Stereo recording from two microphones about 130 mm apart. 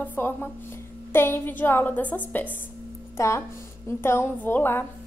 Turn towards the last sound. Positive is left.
turn(degrees=15)  # may be behind; listen again after turning